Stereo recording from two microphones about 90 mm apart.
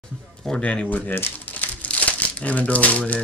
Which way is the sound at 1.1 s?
20° left (ahead or behind).